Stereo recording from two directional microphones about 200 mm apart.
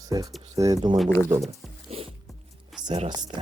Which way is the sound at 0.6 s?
15° right (ahead or behind).